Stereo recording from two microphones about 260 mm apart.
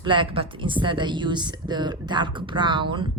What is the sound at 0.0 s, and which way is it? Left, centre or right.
A woman's voice, centre.